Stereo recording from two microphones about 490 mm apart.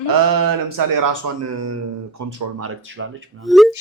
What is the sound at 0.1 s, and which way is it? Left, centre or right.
Speech, right.